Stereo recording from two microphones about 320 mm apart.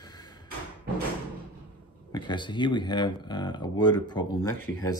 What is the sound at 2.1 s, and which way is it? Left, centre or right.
Speech, centre.